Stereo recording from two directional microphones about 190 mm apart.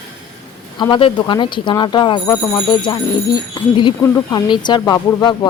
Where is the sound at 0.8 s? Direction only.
25° left (ahead or behind).